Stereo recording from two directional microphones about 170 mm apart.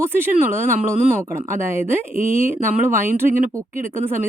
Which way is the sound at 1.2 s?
15° right (ahead or behind).